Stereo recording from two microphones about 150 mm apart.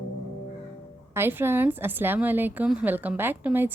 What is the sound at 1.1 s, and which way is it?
A woman's voice, 15° right (ahead or behind).